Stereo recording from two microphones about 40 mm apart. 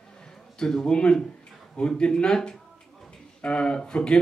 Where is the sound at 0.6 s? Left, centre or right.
Centre.